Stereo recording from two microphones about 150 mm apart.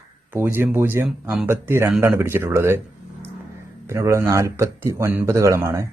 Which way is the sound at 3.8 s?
20° right (ahead or behind).